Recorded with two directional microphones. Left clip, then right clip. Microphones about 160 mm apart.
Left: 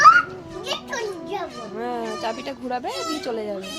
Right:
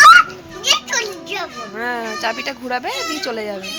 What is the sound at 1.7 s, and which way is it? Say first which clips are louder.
Speech: right 5 dB; 20° right (ahead or behind).